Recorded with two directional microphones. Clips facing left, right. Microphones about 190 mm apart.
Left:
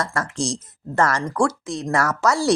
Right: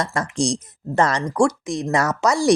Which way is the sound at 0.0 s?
15° right (ahead or behind).